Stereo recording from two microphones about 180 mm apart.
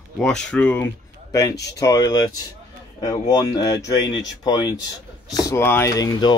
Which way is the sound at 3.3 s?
20° left (ahead or behind).